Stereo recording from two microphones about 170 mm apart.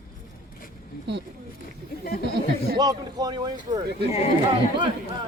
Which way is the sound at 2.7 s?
25° right (ahead or behind).